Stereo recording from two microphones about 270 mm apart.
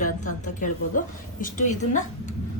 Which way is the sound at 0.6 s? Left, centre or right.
Left.